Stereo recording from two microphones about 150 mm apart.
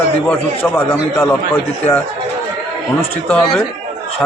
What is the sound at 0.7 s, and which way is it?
A man's voice, 15° left (ahead or behind).